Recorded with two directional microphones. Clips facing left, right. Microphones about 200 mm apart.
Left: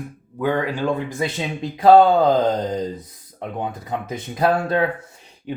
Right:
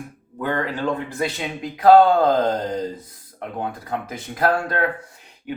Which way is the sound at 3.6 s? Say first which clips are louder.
Even; 20° left (ahead or behind).